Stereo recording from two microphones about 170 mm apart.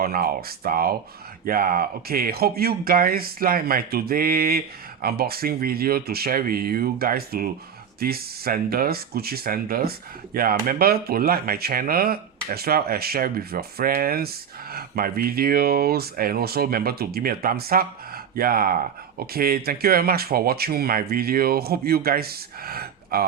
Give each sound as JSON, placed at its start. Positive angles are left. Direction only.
{"t": 0.0, "sound": "speech", "side_deg": -60}